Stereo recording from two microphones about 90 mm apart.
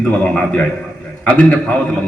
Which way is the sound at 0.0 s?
15° left (ahead or behind).